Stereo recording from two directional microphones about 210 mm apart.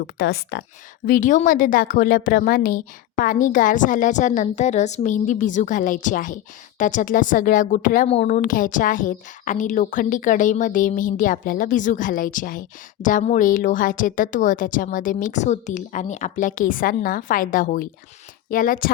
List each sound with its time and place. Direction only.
0.2 s speech: 50° left (ahead or behind)
1.0 s a woman's voice: 40° left (ahead or behind)